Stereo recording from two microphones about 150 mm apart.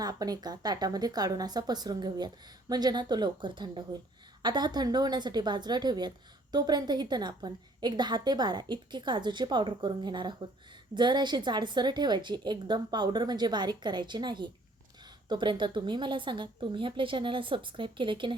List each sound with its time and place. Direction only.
0.0 s a woman's voice: 25° right (ahead or behind)